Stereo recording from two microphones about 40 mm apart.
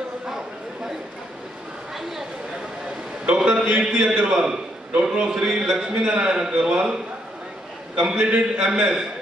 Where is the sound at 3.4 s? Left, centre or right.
Right.